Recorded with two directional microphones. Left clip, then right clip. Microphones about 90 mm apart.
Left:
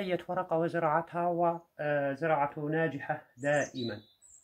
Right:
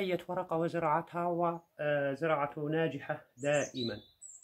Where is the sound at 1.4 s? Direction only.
25° right (ahead or behind).